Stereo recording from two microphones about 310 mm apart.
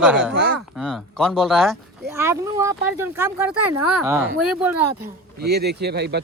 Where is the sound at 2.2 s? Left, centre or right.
Centre.